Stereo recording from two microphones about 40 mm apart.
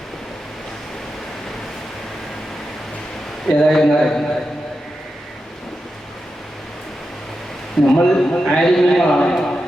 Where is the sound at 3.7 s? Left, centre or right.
Centre.